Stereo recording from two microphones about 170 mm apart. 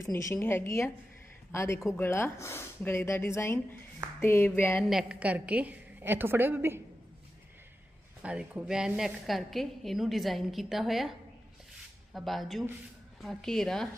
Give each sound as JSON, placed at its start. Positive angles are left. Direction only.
{"t": 0.0, "sound": "speech", "side_deg": 15}
{"t": 4.8, "sound": "a woman's voice", "side_deg": -5}
{"t": 8.2, "sound": "a woman's voice", "side_deg": -5}
{"t": 12.1, "sound": "a woman's voice", "side_deg": 0}